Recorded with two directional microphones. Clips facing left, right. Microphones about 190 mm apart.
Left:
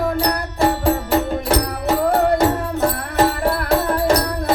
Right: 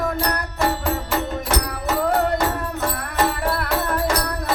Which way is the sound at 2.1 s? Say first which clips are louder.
Left 5 dB; 30° left (ahead or behind).